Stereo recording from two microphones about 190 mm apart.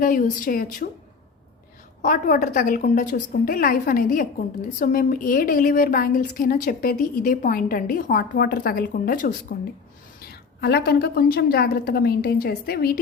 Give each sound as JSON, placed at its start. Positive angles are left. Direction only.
{"t": 0.0, "sound": "a woman's voice", "side_deg": 45}
{"t": 2.0, "sound": "a woman's voice", "side_deg": 45}